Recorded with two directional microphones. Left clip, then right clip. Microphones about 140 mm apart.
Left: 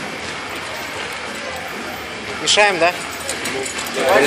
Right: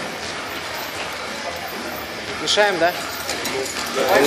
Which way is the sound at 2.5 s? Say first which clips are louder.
Left 3 dB; 20° right (ahead or behind).